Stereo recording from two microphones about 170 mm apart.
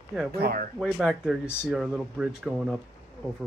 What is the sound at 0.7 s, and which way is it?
Speech, centre (ahead or behind).